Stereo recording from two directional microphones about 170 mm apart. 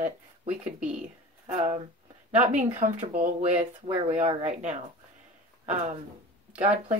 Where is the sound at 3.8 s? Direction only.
35° right (ahead or behind).